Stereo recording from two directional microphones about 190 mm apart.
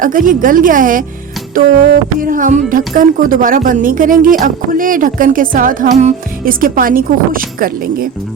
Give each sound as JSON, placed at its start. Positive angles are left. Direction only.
{"t": 0.0, "sound": "a woman's voice", "side_deg": -45}
{"t": 2.2, "sound": "a woman's voice", "side_deg": -45}